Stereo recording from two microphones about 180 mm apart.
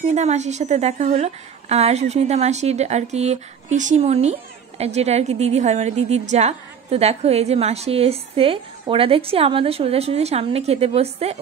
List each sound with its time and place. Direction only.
0.0 s a woman's voice: 40° right (ahead or behind)